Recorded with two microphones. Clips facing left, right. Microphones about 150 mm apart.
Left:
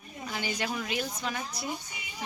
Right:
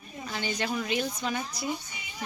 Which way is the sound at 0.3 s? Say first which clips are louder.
Right 2 dB; 10° left (ahead or behind).